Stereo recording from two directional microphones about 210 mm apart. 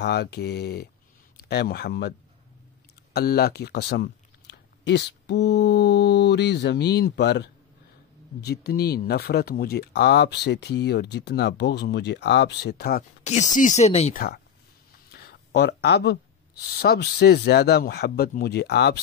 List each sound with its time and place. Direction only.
0.0 s speech: 50° left (ahead or behind)
13.2 s speech: 35° left (ahead or behind)
15.0 s speech: 45° left (ahead or behind)